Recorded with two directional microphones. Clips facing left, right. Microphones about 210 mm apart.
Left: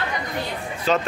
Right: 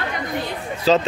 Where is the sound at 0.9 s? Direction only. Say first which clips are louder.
Right 5 dB; 30° right (ahead or behind).